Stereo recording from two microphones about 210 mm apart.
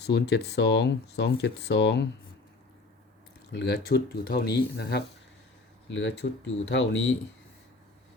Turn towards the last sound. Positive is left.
turn(degrees=60)  # may be behind; listen again after turning